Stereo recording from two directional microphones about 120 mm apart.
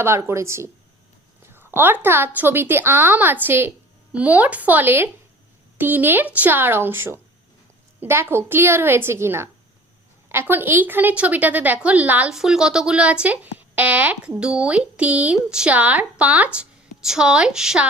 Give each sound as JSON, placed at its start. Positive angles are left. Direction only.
{"t": 0.0, "sound": "a woman's voice", "side_deg": -20}